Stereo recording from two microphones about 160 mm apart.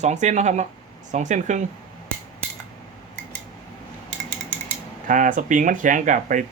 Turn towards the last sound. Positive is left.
turn(degrees=-55)  # may be behind; listen again after turning